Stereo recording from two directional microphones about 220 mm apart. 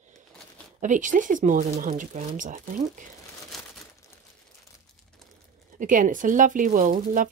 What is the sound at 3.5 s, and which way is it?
Crumpling, centre (ahead or behind).